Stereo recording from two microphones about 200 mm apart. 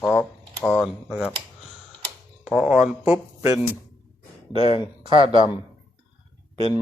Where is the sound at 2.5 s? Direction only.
5° right (ahead or behind).